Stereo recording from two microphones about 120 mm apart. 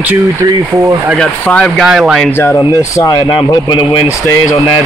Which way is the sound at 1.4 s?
10° left (ahead or behind).